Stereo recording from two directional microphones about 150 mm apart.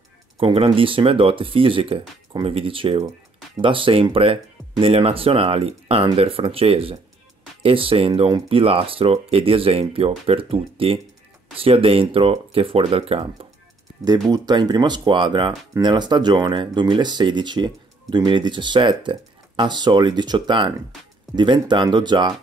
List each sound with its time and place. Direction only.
0.4 s speech: 35° right (ahead or behind)
14.3 s speech: 30° right (ahead or behind)